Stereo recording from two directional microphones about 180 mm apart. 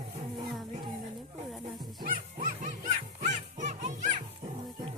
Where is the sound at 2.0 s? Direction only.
45° right (ahead or behind).